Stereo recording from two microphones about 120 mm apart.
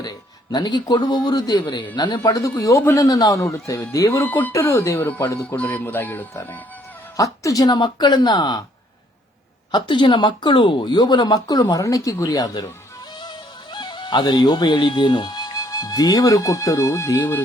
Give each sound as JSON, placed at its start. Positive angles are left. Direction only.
{"t": 0.0, "sound": "a man's voice", "side_deg": 35}
{"t": 4.3, "sound": "speech", "side_deg": 15}
{"t": 7.2, "sound": "speech", "side_deg": 30}
{"t": 9.7, "sound": "speech", "side_deg": 40}